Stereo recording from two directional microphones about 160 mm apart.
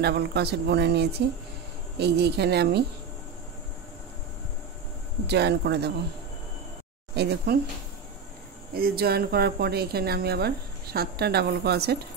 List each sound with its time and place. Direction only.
0.0 s speech: 90° right
5.2 s speech: 90° right
7.2 s speech: 90° right
8.7 s a woman's voice: 75° right (ahead or behind); by 12.0 s 90° right